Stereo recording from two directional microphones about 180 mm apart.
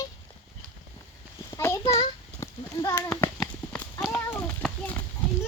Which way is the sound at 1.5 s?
15° left (ahead or behind).